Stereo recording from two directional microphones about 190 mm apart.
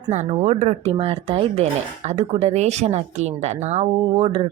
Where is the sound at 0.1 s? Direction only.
35° right (ahead or behind).